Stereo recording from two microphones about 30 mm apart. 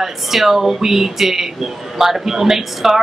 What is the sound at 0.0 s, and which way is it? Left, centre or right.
A woman's voice, centre.